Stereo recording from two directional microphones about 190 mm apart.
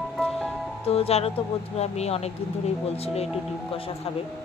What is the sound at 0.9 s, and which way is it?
Speech, 30° left (ahead or behind).